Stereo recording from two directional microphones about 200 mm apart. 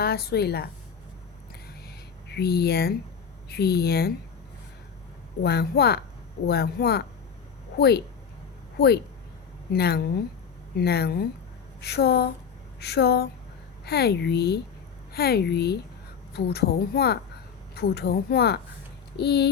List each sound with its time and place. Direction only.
0.0 s speech: 50° left (ahead or behind)
2.3 s speech: 50° left (ahead or behind)
5.4 s speech: 55° left (ahead or behind)
9.7 s speech: 55° left (ahead or behind)